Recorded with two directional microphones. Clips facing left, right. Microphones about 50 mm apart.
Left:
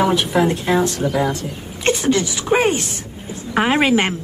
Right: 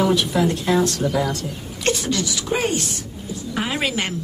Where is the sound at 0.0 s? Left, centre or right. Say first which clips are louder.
Left 2 dB; left.